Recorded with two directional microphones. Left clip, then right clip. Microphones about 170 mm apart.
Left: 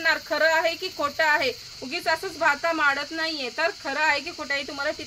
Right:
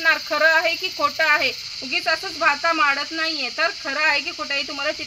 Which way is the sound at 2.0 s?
25° left (ahead or behind).